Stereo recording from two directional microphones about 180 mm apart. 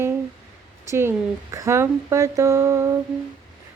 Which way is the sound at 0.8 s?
15° right (ahead or behind).